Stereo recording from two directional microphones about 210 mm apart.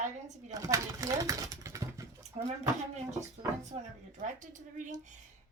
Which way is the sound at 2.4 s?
35° right (ahead or behind).